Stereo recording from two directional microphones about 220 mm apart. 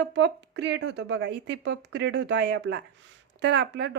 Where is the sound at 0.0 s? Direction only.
50° right (ahead or behind).